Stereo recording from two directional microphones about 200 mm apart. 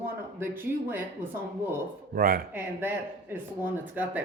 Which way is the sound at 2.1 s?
45° right (ahead or behind).